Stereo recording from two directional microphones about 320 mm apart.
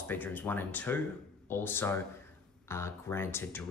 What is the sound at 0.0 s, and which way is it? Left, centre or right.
Speech, centre.